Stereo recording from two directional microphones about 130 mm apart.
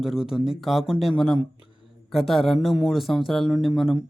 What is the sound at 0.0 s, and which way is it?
Speech, 5° right (ahead or behind).